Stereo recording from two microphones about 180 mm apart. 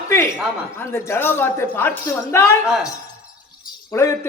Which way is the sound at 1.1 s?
10° left (ahead or behind).